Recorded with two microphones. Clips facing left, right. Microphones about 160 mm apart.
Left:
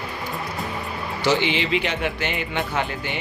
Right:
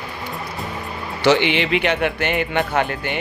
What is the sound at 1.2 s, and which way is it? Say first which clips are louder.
Speech: right 5 dB; 65° right (ahead or behind).